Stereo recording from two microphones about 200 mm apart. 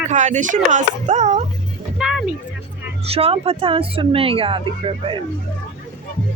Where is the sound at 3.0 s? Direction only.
30° right (ahead or behind).